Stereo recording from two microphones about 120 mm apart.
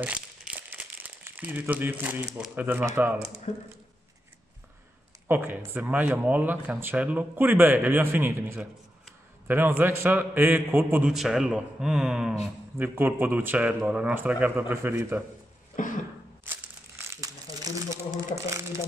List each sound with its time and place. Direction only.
0.0 s crumpling: 10° right (ahead or behind)
2.5 s speech: 15° right (ahead or behind)
3.5 s speech: 65° left (ahead or behind)
5.3 s speech: 20° right (ahead or behind)
11.1 s speech: 5° right (ahead or behind)
12.7 s speech: 20° right (ahead or behind)
15.8 s cough: 90° left
17.0 s crumpling: 25° right (ahead or behind)